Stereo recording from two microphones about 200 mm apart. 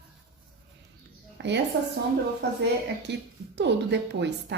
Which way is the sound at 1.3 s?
60° right (ahead or behind).